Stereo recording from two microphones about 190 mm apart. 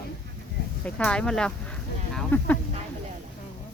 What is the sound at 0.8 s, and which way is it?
Speech, 5° left (ahead or behind).